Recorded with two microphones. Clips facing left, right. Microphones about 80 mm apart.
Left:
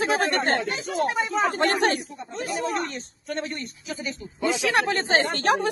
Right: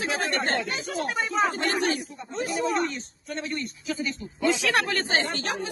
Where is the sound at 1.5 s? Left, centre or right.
Left.